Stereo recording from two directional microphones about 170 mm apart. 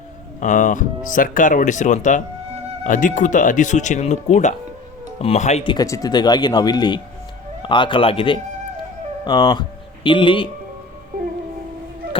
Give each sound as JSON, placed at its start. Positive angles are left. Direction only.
{"t": 0.3, "sound": "speech", "side_deg": 45}
{"t": 5.7, "sound": "speech", "side_deg": 20}